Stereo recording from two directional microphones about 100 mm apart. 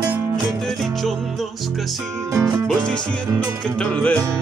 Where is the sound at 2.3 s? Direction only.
35° right (ahead or behind).